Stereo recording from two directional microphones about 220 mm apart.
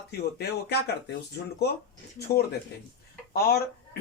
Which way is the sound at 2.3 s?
15° left (ahead or behind).